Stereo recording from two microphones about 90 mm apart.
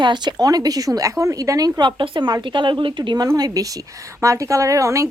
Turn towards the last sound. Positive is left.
turn(degrees=-35)  # may be behind; listen again after turning